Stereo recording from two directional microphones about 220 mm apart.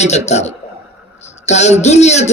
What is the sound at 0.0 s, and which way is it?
A man's voice, 30° left (ahead or behind).